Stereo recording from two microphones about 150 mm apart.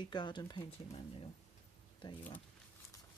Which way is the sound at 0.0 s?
30° left (ahead or behind).